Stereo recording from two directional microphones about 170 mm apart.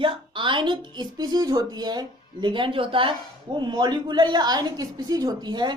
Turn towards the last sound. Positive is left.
turn(degrees=-25)  # may be behind; listen again after turning